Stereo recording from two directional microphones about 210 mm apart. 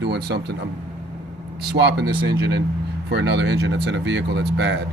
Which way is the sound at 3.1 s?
55° right (ahead or behind).